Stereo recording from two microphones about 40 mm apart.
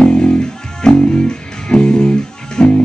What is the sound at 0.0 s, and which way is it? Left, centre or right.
Music, centre.